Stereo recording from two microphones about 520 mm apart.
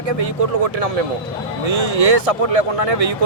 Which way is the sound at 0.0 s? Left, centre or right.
Right.